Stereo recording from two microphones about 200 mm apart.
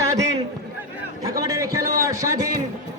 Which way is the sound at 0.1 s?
20° right (ahead or behind).